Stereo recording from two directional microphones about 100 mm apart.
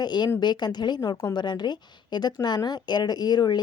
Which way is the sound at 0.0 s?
45° left (ahead or behind).